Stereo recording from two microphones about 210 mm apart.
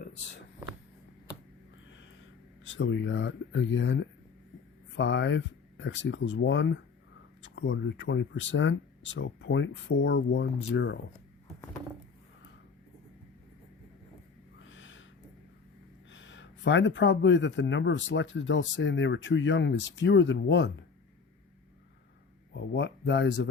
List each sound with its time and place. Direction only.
2.7 s speech: 60° left (ahead or behind)
14.6 s a sound: 65° left (ahead or behind)
16.1 s speech: 60° left (ahead or behind)
22.5 s speech: 55° left (ahead or behind)